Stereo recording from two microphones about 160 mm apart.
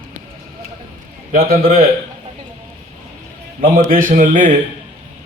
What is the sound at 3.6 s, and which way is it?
Speech, 60° right (ahead or behind).